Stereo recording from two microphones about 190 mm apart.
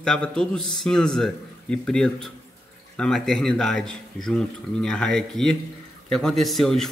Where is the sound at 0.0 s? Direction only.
5° left (ahead or behind).